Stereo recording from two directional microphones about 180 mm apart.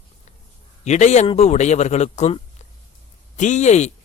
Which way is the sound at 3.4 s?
40° left (ahead or behind).